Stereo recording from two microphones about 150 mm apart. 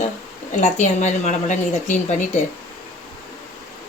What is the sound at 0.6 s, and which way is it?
A woman's voice, 55° left (ahead or behind).